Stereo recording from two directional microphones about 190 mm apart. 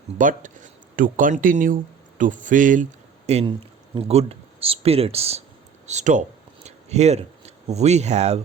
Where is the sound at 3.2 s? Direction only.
35° right (ahead or behind).